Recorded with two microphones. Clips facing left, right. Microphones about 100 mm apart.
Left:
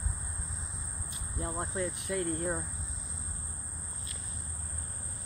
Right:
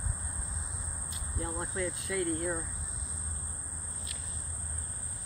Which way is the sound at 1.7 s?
25° left (ahead or behind).